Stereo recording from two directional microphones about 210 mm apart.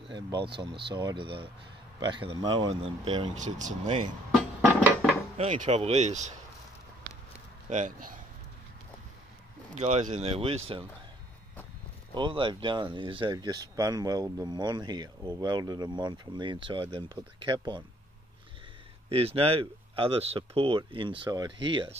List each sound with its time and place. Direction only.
0.1 s speech: 20° right (ahead or behind)
4.3 s music: centre (ahead or behind)
5.4 s speech: 30° right (ahead or behind)
7.7 s speech: 35° right (ahead or behind)
9.8 s speech: 30° right (ahead or behind)
12.1 s speech: 25° right (ahead or behind)
19.0 s speech: 25° right (ahead or behind)